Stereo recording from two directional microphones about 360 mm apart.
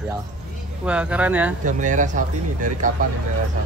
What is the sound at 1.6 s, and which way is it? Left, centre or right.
Speech, right.